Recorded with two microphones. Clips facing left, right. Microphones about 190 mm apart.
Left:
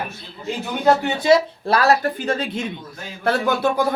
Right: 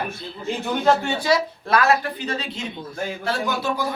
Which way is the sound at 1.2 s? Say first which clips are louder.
Left 9 dB; 30° left (ahead or behind).